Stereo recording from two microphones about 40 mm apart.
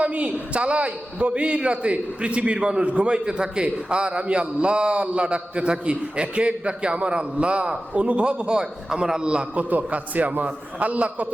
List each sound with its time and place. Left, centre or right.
0.0 s a man's voice: right
9.6 s a man's voice: right